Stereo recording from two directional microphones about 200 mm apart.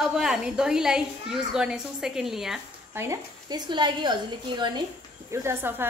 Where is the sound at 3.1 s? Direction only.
20° right (ahead or behind).